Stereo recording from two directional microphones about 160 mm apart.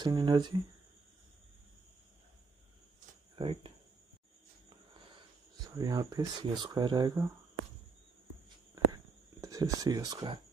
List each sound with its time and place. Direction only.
0.0 s speech: 25° right (ahead or behind)
3.3 s speech: 30° right (ahead or behind)
5.6 s speech: 25° right (ahead or behind)
8.9 s a sound: 20° right (ahead or behind)